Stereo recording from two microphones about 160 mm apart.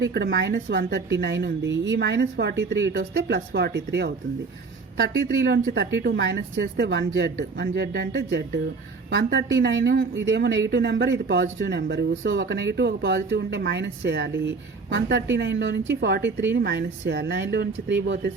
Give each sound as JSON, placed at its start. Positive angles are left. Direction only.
{"t": 0.0, "sound": "a woman's voice", "side_deg": -90}